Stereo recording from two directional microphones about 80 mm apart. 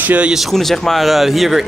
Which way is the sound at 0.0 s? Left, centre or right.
Centre.